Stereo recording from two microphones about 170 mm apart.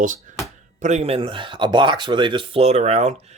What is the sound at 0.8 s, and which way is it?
Speech, 45° right (ahead or behind).